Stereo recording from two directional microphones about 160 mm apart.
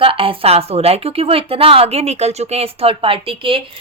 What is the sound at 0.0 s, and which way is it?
A woman's voice, 35° right (ahead or behind).